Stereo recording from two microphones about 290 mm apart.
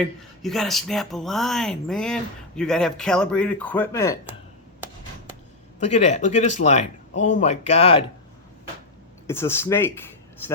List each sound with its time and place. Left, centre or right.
0.4 s speech: centre
5.8 s speech: left
9.2 s speech: centre